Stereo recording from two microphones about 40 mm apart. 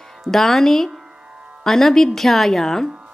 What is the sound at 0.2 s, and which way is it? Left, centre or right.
Speech, centre.